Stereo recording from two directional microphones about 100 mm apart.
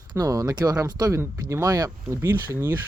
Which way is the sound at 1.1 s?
25° right (ahead or behind).